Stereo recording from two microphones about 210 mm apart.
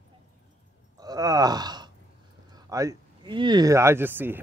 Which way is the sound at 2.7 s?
15° right (ahead or behind).